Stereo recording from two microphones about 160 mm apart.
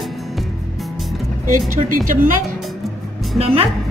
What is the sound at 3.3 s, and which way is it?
Speech, 40° right (ahead or behind).